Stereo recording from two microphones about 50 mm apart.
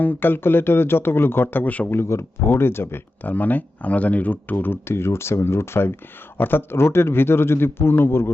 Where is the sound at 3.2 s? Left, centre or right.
Left.